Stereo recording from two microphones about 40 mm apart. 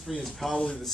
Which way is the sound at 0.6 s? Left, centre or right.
Centre.